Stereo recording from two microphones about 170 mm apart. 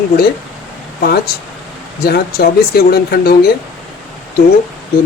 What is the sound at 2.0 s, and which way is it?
Speech, 65° left (ahead or behind).